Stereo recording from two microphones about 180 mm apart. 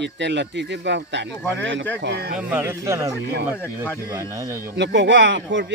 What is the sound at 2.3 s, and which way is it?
Speech, 10° right (ahead or behind).